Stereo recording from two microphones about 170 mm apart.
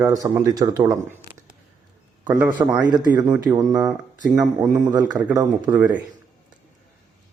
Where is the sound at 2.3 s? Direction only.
10° right (ahead or behind).